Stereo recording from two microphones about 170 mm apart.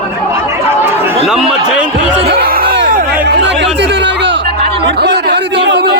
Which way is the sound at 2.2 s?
70° right (ahead or behind).